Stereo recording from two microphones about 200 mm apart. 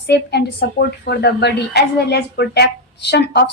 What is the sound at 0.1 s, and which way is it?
A woman's voice, 55° left (ahead or behind).